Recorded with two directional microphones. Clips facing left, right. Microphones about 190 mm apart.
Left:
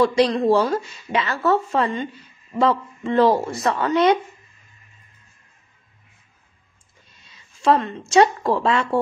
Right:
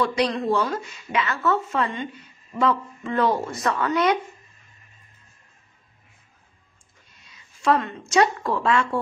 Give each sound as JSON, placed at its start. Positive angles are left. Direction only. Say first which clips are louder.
{"t": 0.0, "sound": "speech", "louder": "left 6 dB", "side_deg": 35}
{"t": 7.2, "sound": "a woman's voice", "louder": "left 3 dB", "side_deg": 25}